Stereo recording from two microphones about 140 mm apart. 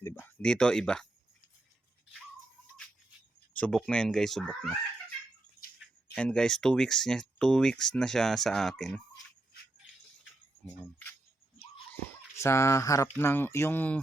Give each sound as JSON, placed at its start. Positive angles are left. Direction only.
{"t": 0.0, "sound": "speech", "side_deg": 15}
{"t": 3.5, "sound": "speech", "side_deg": 5}
{"t": 6.1, "sound": "speech", "side_deg": 5}
{"t": 12.4, "sound": "speech", "side_deg": 20}